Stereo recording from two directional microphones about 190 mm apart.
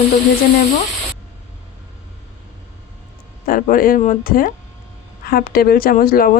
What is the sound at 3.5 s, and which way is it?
Speech, 45° left (ahead or behind).